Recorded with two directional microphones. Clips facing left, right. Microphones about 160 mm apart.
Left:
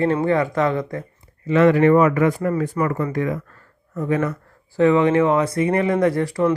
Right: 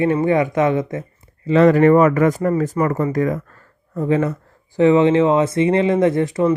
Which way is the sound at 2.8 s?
25° right (ahead or behind).